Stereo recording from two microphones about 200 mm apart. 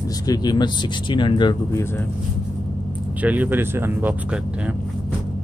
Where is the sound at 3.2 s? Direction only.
10° right (ahead or behind).